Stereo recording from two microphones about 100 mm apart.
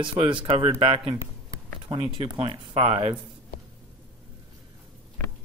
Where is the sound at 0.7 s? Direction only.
70° right (ahead or behind).